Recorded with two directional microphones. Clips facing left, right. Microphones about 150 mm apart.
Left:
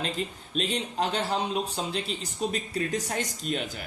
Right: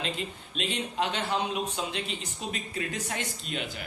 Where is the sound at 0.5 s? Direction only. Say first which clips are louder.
Left 2 dB; 40° left (ahead or behind).